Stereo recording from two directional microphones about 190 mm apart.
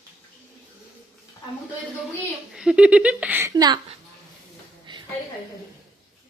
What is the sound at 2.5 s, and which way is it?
Speech, 5° right (ahead or behind).